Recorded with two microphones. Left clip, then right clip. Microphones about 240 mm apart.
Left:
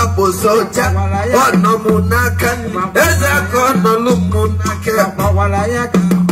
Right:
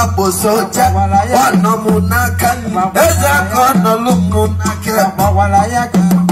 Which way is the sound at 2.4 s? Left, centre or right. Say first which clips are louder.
Right 3 dB; right.